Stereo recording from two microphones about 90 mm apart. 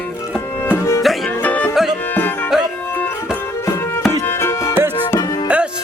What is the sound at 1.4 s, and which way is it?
Music, 15° left (ahead or behind).